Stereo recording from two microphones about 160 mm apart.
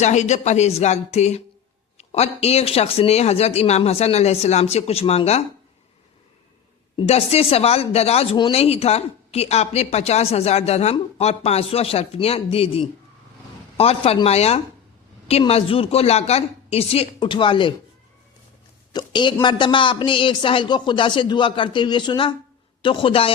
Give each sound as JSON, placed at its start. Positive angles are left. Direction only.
{"t": 0.0, "sound": "speech", "side_deg": 45}
{"t": 6.9, "sound": "speech", "side_deg": 40}
{"t": 18.9, "sound": "a woman's voice", "side_deg": 30}